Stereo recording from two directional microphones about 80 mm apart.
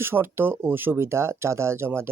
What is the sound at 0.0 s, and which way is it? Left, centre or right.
Speech, right.